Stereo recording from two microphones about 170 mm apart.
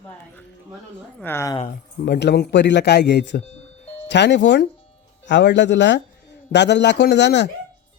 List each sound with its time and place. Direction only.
1.2 s speech: 15° left (ahead or behind)
2.0 s speech: 85° left